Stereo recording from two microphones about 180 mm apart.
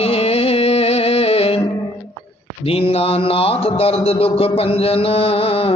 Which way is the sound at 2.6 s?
30° left (ahead or behind).